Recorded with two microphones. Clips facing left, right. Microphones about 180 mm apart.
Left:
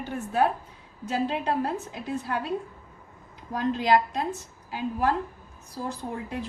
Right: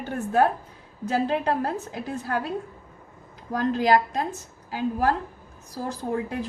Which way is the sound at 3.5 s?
45° right (ahead or behind).